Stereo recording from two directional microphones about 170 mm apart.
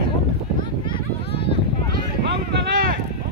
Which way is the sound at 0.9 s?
30° left (ahead or behind).